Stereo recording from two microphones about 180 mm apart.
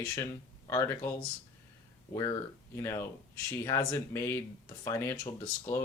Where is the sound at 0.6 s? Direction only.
15° left (ahead or behind).